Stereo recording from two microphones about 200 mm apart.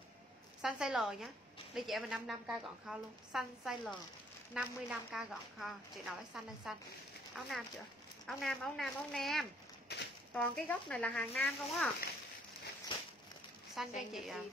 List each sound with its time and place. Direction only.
0.6 s a woman's voice: 5° right (ahead or behind)
9.9 s a sound: 55° left (ahead or behind)
10.3 s speech: 5° left (ahead or behind)
13.7 s a woman's voice: centre (ahead or behind)